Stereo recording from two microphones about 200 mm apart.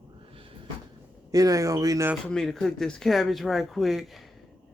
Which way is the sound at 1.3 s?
20° right (ahead or behind).